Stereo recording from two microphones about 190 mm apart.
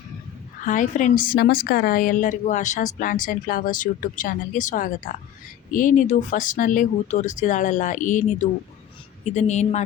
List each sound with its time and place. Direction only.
0.6 s a woman's voice: 40° left (ahead or behind)